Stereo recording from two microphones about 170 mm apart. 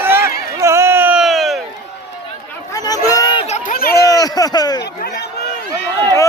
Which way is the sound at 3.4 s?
40° left (ahead or behind).